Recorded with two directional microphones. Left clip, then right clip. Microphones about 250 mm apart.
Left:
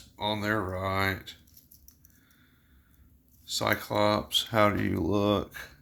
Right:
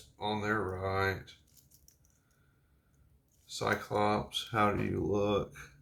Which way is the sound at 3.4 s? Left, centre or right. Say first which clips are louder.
Left 5 dB; left.